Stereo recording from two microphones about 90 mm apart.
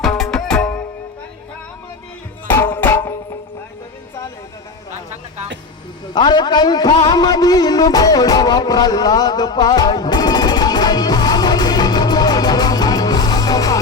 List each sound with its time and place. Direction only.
0.0 s music: 5° left (ahead or behind)
2.5 s music: 25° left (ahead or behind)
6.1 s a man's voice: 55° left (ahead or behind)
6.9 s music: 50° left (ahead or behind)